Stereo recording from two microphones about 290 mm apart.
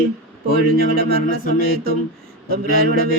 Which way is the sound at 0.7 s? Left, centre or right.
Right.